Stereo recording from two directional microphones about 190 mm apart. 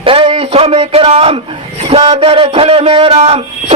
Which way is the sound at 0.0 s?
30° right (ahead or behind).